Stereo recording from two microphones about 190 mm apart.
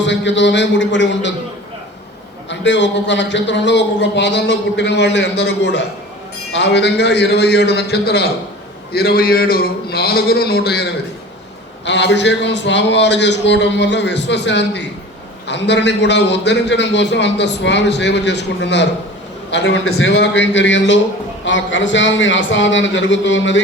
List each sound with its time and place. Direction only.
0.0 s a man's voice: 70° left (ahead or behind)
2.5 s a man's voice: 70° left (ahead or behind); by 10.8 s 55° left (ahead or behind)
11.9 s a man's voice: 65° left (ahead or behind)